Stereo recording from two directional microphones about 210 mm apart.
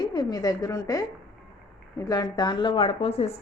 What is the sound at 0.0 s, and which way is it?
A woman's voice, 20° left (ahead or behind).